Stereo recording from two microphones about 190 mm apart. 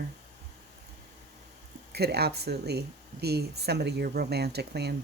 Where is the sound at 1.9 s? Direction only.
55° right (ahead or behind).